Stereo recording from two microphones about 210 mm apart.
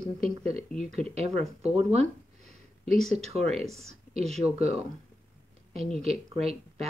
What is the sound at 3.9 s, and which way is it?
Speech, 30° right (ahead or behind).